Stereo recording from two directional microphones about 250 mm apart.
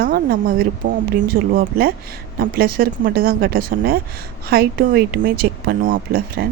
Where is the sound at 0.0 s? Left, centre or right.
Right.